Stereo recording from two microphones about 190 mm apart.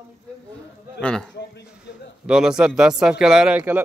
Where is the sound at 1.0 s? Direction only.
5° left (ahead or behind).